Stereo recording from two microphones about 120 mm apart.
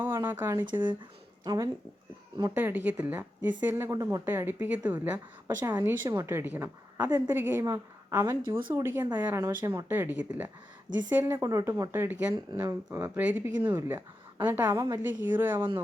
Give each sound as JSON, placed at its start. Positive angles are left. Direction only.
{"t": 0.0, "sound": "speech", "side_deg": -20}
{"t": 1.5, "sound": "speech", "side_deg": -30}
{"t": 2.6, "sound": "speech", "side_deg": -15}
{"t": 3.9, "sound": "speech", "side_deg": -30}
{"t": 4.3, "sound": "a woman's voice", "side_deg": -15}
{"t": 8.4, "sound": "speech", "side_deg": -40}
{"t": 8.7, "sound": "speech", "side_deg": -20}